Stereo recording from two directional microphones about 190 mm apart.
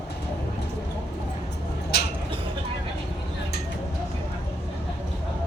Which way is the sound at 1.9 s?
60° left (ahead or behind).